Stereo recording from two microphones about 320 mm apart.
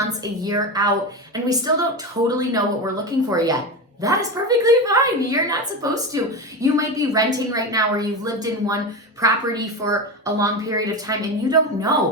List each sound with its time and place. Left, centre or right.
0.4 s a woman's voice: centre